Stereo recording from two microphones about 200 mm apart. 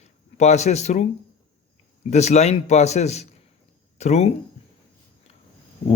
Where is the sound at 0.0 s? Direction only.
35° left (ahead or behind).